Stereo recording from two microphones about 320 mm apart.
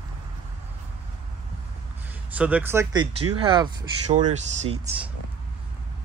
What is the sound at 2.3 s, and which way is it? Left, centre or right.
Speech, centre.